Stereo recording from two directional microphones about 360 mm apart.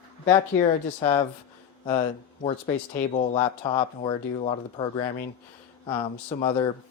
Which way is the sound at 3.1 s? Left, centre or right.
Centre.